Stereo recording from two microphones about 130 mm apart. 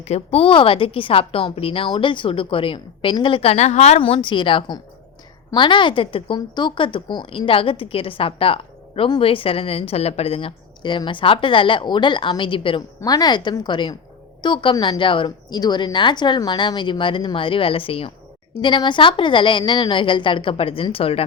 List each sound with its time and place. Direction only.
0.0 s a woman's voice: 55° left (ahead or behind)
13.0 s a woman's voice: 30° left (ahead or behind); by 21.2 s 45° left (ahead or behind)